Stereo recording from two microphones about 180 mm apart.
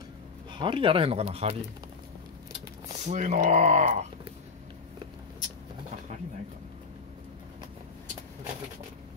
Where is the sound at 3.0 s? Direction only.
40° right (ahead or behind).